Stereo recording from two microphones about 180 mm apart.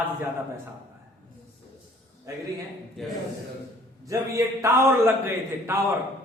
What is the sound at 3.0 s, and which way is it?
Speech, centre (ahead or behind).